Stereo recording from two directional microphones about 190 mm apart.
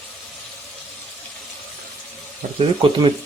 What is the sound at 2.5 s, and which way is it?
Speech, 25° right (ahead or behind).